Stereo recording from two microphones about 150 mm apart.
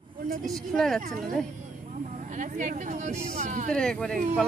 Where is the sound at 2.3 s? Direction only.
55° right (ahead or behind).